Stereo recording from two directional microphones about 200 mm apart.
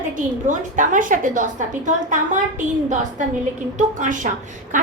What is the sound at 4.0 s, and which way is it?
Speech, 40° right (ahead or behind).